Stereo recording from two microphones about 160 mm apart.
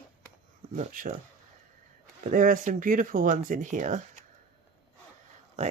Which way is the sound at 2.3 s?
55° right (ahead or behind).